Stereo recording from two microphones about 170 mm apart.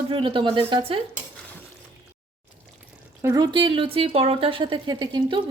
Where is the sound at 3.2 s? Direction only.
20° right (ahead or behind).